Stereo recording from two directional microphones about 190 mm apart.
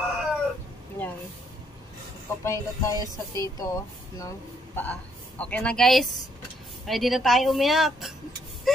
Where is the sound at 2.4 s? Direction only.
15° left (ahead or behind).